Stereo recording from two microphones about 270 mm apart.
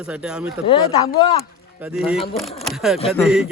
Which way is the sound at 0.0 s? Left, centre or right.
Centre.